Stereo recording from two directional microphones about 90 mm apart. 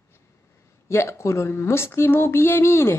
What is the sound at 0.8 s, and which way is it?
Speech, 30° left (ahead or behind).